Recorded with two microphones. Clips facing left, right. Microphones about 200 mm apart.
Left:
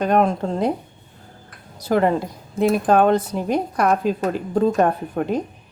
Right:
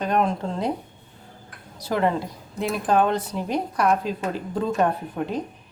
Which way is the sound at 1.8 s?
50° left (ahead or behind).